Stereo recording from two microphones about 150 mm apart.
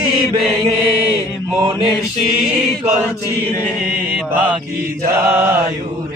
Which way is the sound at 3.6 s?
5° right (ahead or behind).